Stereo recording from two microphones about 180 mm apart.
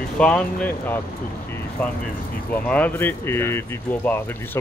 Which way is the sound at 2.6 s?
10° left (ahead or behind).